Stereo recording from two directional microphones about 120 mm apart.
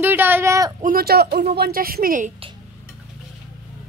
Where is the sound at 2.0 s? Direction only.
70° right (ahead or behind).